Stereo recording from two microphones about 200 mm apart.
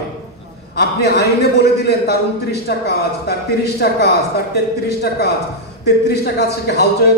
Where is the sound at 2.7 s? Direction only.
55° left (ahead or behind).